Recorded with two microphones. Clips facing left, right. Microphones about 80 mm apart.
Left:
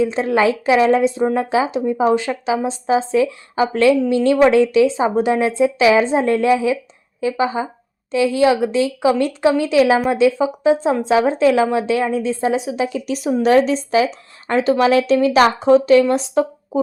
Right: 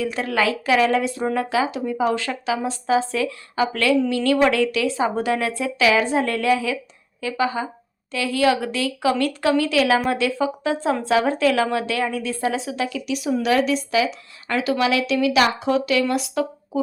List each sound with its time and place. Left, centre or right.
0.0 s speech: left
12.9 s a woman's voice: left